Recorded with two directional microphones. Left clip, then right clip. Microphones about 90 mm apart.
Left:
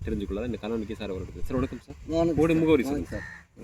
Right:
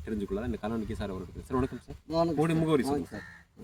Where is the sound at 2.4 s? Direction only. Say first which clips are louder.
Left 5 dB; 45° right (ahead or behind).